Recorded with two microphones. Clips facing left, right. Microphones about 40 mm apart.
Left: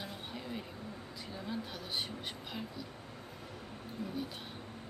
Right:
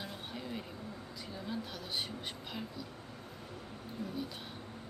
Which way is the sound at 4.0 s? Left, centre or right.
Centre.